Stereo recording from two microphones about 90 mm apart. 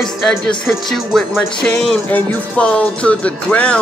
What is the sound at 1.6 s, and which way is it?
Music, 10° left (ahead or behind).